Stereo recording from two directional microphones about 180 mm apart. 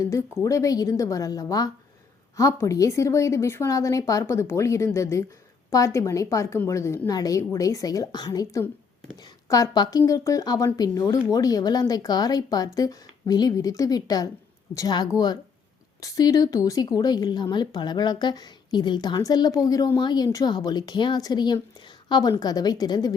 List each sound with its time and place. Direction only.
0.0 s a woman's voice: 15° left (ahead or behind)